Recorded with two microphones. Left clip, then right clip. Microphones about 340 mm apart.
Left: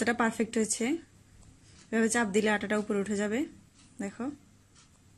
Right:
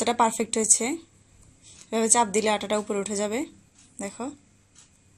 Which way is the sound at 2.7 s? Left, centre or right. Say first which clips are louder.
Right 4 dB; right.